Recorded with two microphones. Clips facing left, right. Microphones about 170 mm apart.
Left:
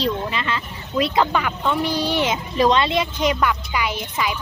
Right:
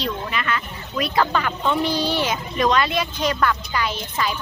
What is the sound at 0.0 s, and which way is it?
Speech, 25° left (ahead or behind).